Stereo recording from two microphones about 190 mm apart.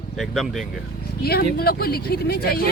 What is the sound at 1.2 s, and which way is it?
Speech, 55° left (ahead or behind).